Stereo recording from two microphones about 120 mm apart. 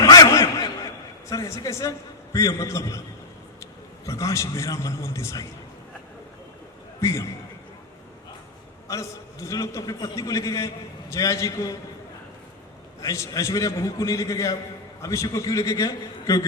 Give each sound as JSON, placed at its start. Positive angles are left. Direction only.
{"t": 0.0, "sound": "chuckle", "side_deg": 30}
{"t": 1.3, "sound": "a man's voice", "side_deg": 25}
{"t": 7.0, "sound": "a man's voice", "side_deg": 25}
{"t": 8.9, "sound": "a man's voice", "side_deg": 25}
{"t": 13.0, "sound": "a man's voice", "side_deg": 25}